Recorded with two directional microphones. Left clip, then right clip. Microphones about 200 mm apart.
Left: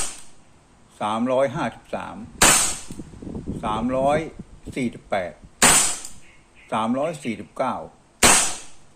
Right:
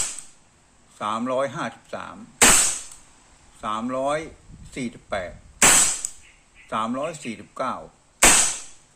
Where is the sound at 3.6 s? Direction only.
5° right (ahead or behind).